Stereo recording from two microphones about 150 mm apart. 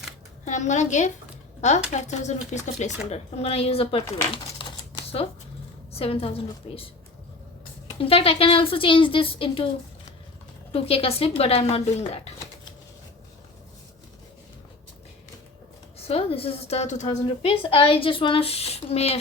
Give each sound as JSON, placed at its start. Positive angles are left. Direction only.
{"t": 0.4, "sound": "speech", "side_deg": 55}
{"t": 5.9, "sound": "speech", "side_deg": 40}
{"t": 7.9, "sound": "speech", "side_deg": 40}
{"t": 10.7, "sound": "speech", "side_deg": 40}
{"t": 16.0, "sound": "speech", "side_deg": 40}
{"t": 17.2, "sound": "speech", "side_deg": 35}